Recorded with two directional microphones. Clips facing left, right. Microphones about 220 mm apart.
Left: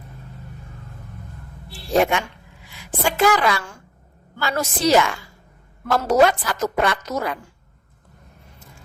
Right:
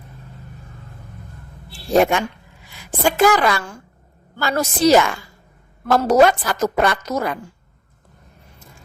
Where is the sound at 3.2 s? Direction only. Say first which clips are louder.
Even; 45° right (ahead or behind).